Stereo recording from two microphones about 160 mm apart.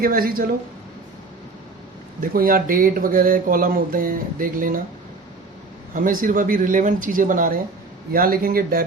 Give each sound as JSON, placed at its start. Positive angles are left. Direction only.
{"t": 0.0, "sound": "speech", "side_deg": -65}
{"t": 2.2, "sound": "speech", "side_deg": -65}
{"t": 5.9, "sound": "speech", "side_deg": -60}